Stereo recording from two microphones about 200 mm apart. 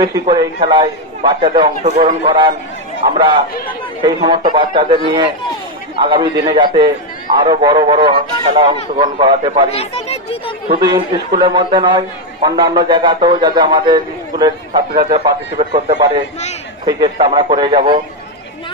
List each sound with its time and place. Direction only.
0.0 s a man's voice: 25° right (ahead or behind)
1.8 s a man's voice: 35° right (ahead or behind)
4.0 s a man's voice: 20° right (ahead or behind)
9.7 s speech: 30° left (ahead or behind)
10.7 s a man's voice: 25° right (ahead or behind)